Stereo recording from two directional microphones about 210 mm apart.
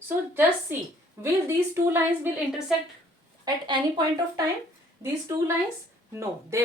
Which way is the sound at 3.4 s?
20° right (ahead or behind).